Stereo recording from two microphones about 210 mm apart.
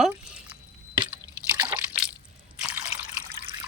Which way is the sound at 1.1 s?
10° right (ahead or behind).